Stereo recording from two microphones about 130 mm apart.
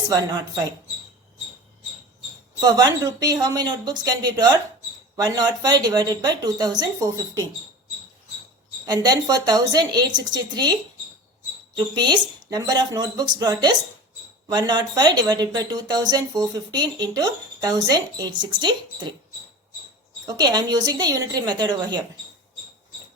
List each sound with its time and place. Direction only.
0.1 s speech: 30° right (ahead or behind)
2.6 s speech: 30° right (ahead or behind)
8.9 s speech: 30° right (ahead or behind)
11.8 s speech: 35° right (ahead or behind)
20.2 s speech: 30° right (ahead or behind)